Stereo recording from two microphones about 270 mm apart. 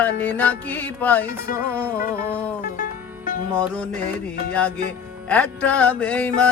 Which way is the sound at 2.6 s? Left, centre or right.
Left.